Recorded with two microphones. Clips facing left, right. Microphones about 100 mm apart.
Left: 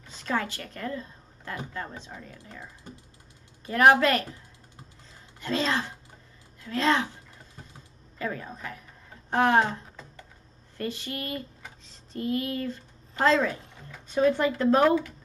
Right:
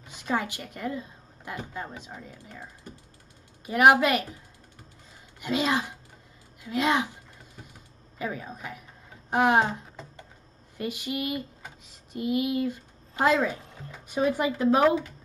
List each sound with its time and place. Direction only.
0.0 s speech: 15° right (ahead or behind)
3.6 s speech: 15° right (ahead or behind)
5.4 s speech: 15° right (ahead or behind)
8.2 s speech: 15° right (ahead or behind)
10.8 s a woman's voice: 15° right (ahead or behind)